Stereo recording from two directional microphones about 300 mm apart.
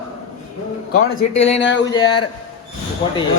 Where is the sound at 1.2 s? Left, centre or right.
Left.